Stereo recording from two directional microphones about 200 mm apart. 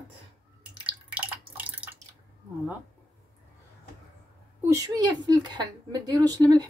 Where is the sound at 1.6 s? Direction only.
5° right (ahead or behind).